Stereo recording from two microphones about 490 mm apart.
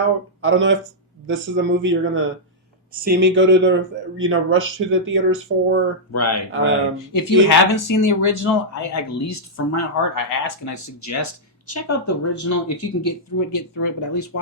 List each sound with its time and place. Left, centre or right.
0.4 s speech: right
6.1 s speech: left